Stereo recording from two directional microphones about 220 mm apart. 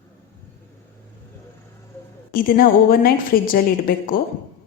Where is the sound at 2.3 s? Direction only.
40° left (ahead or behind).